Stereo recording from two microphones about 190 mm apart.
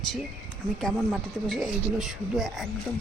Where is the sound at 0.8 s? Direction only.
Centre (ahead or behind).